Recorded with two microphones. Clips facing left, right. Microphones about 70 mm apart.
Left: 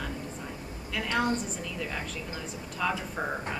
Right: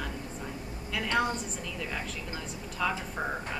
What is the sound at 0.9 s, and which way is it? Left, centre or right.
A woman's voice, centre.